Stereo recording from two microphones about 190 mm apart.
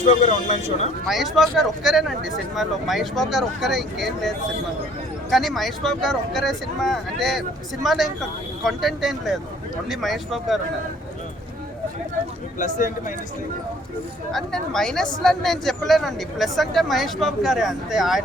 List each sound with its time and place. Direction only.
0.0 s speech: 35° left (ahead or behind)
1.0 s speech: centre (ahead or behind)
12.5 s speech: 40° left (ahead or behind)
14.3 s speech: 5° left (ahead or behind)